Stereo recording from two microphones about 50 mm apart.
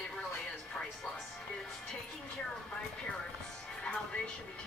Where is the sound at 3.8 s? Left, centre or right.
Centre.